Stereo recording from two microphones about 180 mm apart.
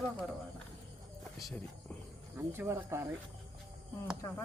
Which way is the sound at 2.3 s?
15° right (ahead or behind).